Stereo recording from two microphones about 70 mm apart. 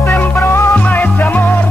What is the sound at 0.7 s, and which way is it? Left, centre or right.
Music, left.